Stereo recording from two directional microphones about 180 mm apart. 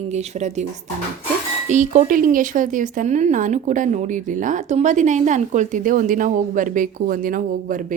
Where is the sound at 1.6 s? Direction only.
45° right (ahead or behind).